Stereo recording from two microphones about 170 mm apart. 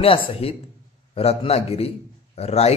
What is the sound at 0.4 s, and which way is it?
Speech, 35° left (ahead or behind).